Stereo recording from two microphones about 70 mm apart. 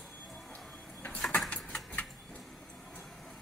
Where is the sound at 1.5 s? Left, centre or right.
Left.